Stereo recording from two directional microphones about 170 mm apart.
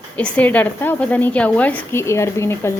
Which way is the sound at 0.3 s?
10° left (ahead or behind).